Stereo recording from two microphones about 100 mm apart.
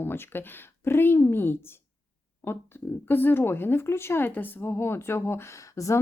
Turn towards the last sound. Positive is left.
turn(degrees=30)  # may be behind; listen again after turning